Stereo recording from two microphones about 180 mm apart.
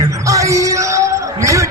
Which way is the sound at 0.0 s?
20° right (ahead or behind).